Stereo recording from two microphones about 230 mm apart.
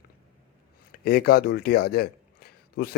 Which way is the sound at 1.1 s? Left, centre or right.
Left.